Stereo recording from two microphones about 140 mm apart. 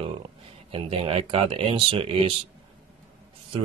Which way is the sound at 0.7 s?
45° right (ahead or behind).